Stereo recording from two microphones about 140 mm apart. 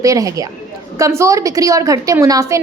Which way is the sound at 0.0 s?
25° right (ahead or behind).